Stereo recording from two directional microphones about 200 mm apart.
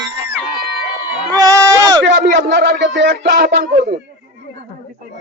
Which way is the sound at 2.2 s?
55° right (ahead or behind).